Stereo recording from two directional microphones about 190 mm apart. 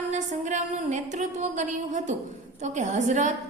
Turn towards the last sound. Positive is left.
turn(degrees=-40)  # may be behind; listen again after turning